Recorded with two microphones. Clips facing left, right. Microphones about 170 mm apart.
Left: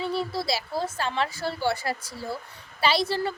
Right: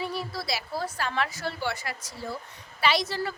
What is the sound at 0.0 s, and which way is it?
A woman's voice, 25° left (ahead or behind).